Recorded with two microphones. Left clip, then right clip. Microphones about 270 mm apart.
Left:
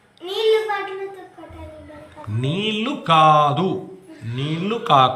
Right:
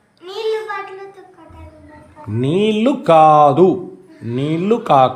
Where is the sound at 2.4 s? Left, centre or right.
Right.